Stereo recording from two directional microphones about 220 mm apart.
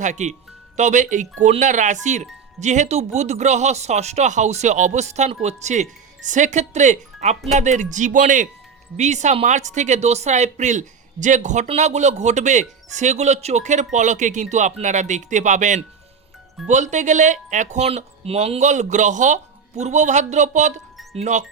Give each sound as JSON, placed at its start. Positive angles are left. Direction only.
{"t": 0.0, "sound": "speech", "side_deg": -35}